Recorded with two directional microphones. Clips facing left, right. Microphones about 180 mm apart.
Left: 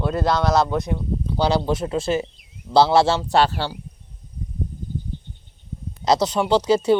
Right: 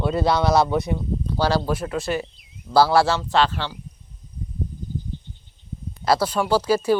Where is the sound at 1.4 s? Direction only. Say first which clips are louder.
Left 2 dB; 15° left (ahead or behind).